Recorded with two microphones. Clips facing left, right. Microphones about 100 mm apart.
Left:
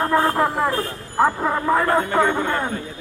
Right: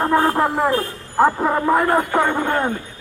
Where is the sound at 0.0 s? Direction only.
15° right (ahead or behind).